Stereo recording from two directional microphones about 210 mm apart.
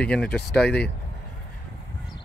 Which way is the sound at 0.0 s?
5° left (ahead or behind).